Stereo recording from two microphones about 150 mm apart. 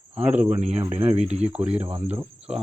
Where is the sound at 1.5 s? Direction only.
10° right (ahead or behind).